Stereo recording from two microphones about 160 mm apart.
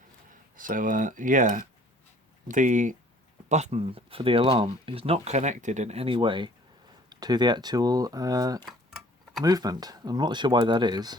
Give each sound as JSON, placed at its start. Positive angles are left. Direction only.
{"t": 0.3, "sound": "speech", "side_deg": -60}